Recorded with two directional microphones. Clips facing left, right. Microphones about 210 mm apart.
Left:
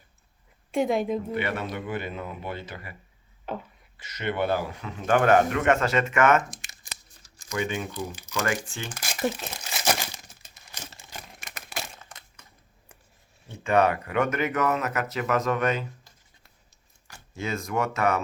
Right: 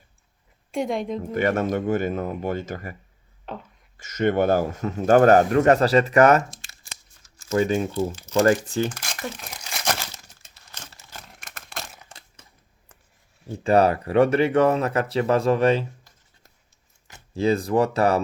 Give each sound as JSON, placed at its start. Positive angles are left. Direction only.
{"t": 0.7, "sound": "a woman's voice", "side_deg": 0}
{"t": 1.3, "sound": "speech", "side_deg": -45}
{"t": 3.5, "sound": "a woman's voice", "side_deg": 5}
{"t": 3.9, "sound": "speech", "side_deg": -45}
{"t": 6.5, "sound": "crumpling", "side_deg": 20}
{"t": 7.6, "sound": "speech", "side_deg": -35}
{"t": 9.7, "sound": "crumpling", "side_deg": 10}
{"t": 11.4, "sound": "crumpling", "side_deg": 0}
{"t": 12.0, "sound": "crushing", "side_deg": -30}
{"t": 13.5, "sound": "speech", "side_deg": -35}
{"t": 17.3, "sound": "speech", "side_deg": -35}